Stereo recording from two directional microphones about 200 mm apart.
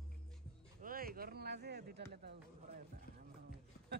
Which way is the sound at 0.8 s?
45° right (ahead or behind).